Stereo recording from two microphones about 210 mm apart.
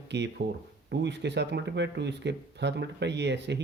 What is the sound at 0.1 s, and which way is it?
Speech, 55° right (ahead or behind).